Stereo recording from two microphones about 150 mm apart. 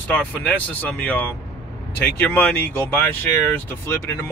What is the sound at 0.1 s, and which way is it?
Speech, 10° left (ahead or behind).